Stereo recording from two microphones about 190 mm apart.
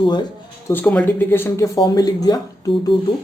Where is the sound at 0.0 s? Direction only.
25° left (ahead or behind).